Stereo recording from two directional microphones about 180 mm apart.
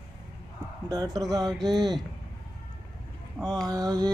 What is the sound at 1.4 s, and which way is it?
Speech, centre (ahead or behind).